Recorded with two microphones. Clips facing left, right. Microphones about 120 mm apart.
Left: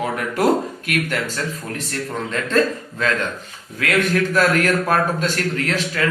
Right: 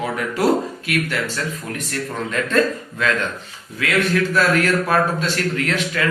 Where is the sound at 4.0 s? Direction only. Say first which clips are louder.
Even; 45° left (ahead or behind).